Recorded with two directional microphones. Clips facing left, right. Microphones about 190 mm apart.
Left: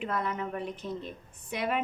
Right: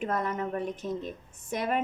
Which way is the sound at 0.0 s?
45° right (ahead or behind).